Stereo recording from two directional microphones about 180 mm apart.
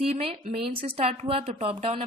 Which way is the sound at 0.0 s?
35° right (ahead or behind).